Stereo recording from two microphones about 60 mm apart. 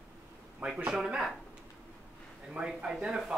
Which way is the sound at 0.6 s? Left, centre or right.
Right.